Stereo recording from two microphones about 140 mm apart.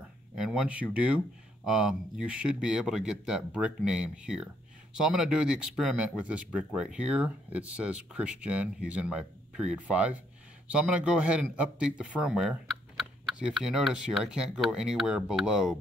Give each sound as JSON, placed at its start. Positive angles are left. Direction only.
{"t": 0.4, "sound": "speech", "side_deg": -5}